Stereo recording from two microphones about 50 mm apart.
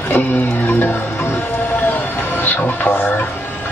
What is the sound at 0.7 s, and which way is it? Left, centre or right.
Speech, left.